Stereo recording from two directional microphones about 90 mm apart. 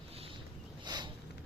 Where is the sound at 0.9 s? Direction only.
50° right (ahead or behind).